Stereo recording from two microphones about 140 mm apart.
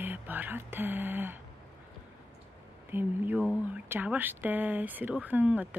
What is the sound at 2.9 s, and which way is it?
Speech, 15° right (ahead or behind).